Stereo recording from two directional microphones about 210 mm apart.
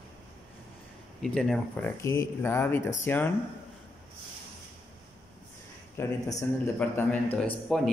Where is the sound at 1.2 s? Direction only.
5° left (ahead or behind).